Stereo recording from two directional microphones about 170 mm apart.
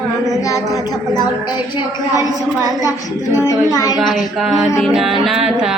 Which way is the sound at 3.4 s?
20° left (ahead or behind).